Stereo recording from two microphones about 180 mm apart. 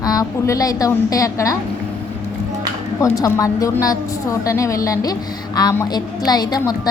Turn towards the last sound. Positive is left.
turn(degrees=20)  # may be behind; listen again after turning